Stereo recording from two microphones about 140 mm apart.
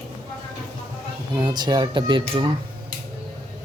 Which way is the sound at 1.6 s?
30° right (ahead or behind).